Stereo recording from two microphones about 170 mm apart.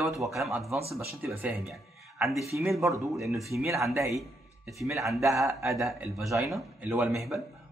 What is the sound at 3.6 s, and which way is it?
Speech, 15° right (ahead or behind).